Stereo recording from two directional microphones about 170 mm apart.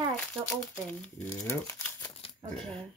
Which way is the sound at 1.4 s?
20° left (ahead or behind).